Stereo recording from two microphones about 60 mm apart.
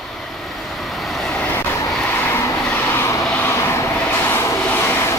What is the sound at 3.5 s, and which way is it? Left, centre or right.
Vehicle, left.